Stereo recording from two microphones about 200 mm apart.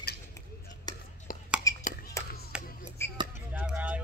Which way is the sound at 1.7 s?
15° left (ahead or behind).